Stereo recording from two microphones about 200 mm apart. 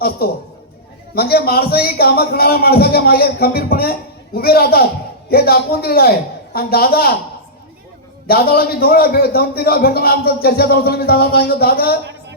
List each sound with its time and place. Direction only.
0.2 s a man's voice: 50° left (ahead or behind)
8.3 s a man's voice: 50° left (ahead or behind)